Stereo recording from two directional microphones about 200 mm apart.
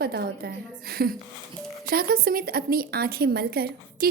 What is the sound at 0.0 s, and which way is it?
A woman's voice, 50° right (ahead or behind).